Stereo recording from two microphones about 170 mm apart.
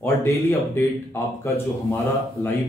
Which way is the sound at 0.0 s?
15° left (ahead or behind).